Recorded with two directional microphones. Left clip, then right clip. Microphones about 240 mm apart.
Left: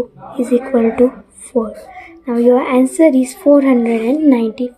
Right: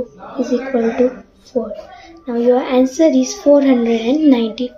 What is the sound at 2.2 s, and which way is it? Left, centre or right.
Speech, left.